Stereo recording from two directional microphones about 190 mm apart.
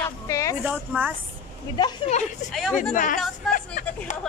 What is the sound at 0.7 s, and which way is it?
Speech, 10° right (ahead or behind).